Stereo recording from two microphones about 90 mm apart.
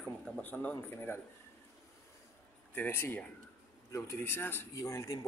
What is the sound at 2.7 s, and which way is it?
Speech, 20° left (ahead or behind).